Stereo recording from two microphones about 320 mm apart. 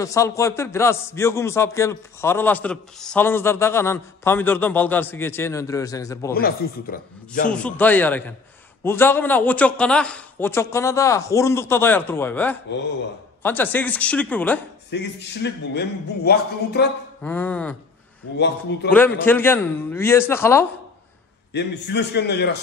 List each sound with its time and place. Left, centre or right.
0.0 s a man's voice: centre
6.3 s a man's voice: left
7.5 s a man's voice: centre
14.9 s a man's voice: left
17.2 s speech: centre
18.4 s a man's voice: left
18.9 s a man's voice: centre
21.5 s a man's voice: left